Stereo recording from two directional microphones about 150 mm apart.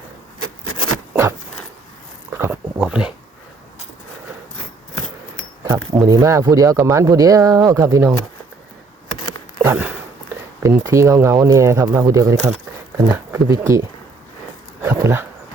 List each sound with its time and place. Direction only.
2.3 s a sound: 15° right (ahead or behind)
2.8 s speech: 5° right (ahead or behind)
5.6 s speech: 20° right (ahead or behind)
9.6 s a sound: 10° right (ahead or behind)
10.8 s speech: 20° right (ahead or behind)
14.8 s dog: 20° right (ahead or behind)